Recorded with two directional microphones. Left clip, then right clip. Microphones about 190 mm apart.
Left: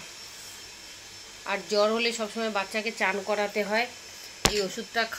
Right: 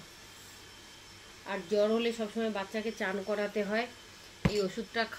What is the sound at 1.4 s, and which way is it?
A woman's voice, 15° right (ahead or behind).